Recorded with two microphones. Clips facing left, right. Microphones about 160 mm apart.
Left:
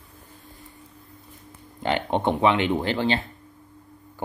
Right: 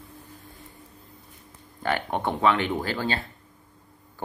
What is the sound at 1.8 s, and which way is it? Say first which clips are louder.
Speech: left 3 dB; 20° left (ahead or behind).